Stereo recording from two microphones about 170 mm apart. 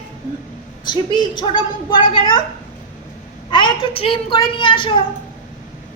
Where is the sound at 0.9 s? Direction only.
25° left (ahead or behind).